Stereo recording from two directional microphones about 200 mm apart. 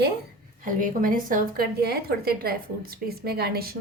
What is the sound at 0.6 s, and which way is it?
A woman's voice, 40° right (ahead or behind).